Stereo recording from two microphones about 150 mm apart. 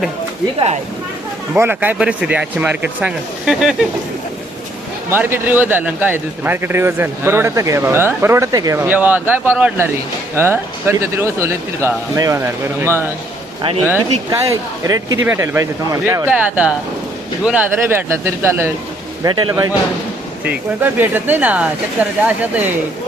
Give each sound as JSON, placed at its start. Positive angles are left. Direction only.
{"t": 1.5, "sound": "a man's voice", "side_deg": -15}
{"t": 5.1, "sound": "a man's voice", "side_deg": -15}
{"t": 14.3, "sound": "a man's voice", "side_deg": -20}
{"t": 19.2, "sound": "speech", "side_deg": -30}
{"t": 20.4, "sound": "a man's voice", "side_deg": -10}